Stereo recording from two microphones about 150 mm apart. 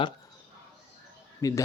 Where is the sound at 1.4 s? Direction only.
20° left (ahead or behind).